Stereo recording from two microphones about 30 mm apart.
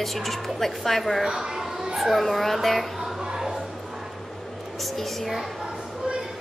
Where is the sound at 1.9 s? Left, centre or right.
Centre.